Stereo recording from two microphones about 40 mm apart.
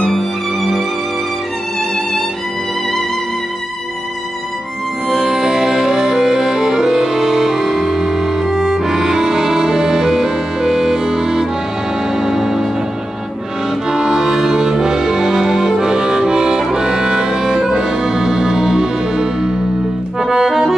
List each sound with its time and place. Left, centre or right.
0.2 s music: centre
1.8 s music: centre
5.0 s music: centre
13.7 s music: centre